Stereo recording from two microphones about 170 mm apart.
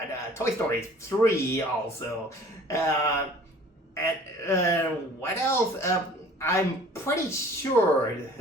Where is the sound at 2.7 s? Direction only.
20° left (ahead or behind).